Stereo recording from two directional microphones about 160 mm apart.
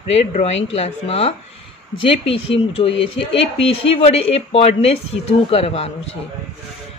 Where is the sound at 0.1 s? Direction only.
45° left (ahead or behind).